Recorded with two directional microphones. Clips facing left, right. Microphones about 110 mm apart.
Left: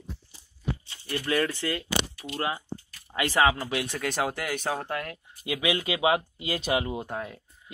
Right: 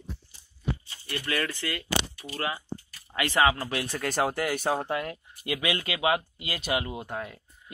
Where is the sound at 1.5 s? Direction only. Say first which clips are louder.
Left 3 dB; 15° left (ahead or behind).